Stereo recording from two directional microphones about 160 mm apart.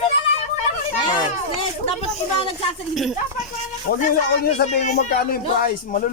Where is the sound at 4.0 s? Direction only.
70° left (ahead or behind).